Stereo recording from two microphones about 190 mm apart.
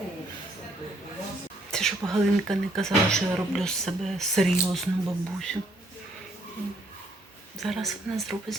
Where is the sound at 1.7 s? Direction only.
5° left (ahead or behind).